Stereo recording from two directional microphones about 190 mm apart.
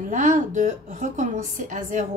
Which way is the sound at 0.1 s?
40° right (ahead or behind).